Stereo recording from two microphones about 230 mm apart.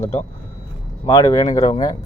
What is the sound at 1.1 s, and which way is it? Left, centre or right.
Speech, centre.